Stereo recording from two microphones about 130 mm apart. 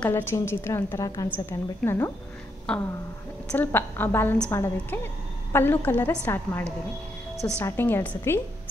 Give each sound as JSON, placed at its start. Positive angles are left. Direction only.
{"t": 0.0, "sound": "a woman's voice", "side_deg": 15}
{"t": 2.7, "sound": "a woman's voice", "side_deg": 5}